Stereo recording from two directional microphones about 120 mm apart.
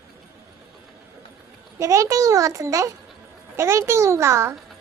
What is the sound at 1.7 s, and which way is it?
A child's voice, 25° right (ahead or behind).